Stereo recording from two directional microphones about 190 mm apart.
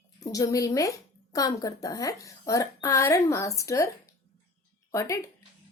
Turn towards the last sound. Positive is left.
turn(degrees=15)  # may be behind; listen again after turning